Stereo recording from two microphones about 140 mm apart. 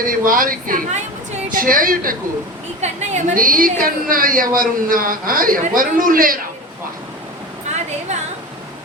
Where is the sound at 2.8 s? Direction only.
55° right (ahead or behind).